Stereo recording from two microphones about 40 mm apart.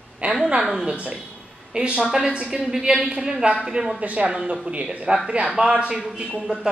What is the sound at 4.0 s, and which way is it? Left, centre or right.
A woman's voice, right.